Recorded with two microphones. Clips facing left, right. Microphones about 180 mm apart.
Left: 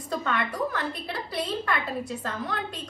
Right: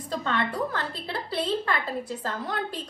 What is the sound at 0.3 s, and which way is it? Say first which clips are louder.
A woman's voice: right 1 dB; 25° right (ahead or behind).